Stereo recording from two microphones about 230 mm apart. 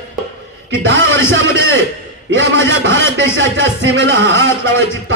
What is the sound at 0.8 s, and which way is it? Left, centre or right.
Speech, right.